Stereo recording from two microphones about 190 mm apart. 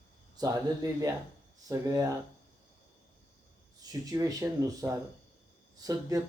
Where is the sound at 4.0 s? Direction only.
20° right (ahead or behind).